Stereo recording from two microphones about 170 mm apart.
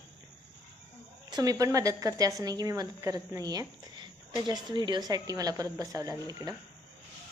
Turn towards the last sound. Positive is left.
turn(degrees=-20)  # may be behind; listen again after turning